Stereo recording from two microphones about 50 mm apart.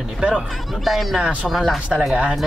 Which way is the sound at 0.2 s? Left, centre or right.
Centre.